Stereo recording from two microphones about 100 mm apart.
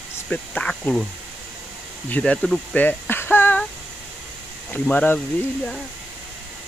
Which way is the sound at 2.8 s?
20° left (ahead or behind).